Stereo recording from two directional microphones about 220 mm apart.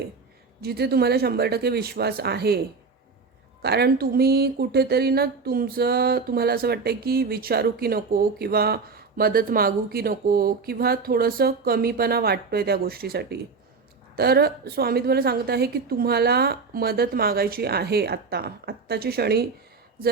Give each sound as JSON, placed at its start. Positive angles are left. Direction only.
{"t": 0.6, "sound": "speech", "side_deg": -45}
{"t": 3.6, "sound": "speech", "side_deg": -45}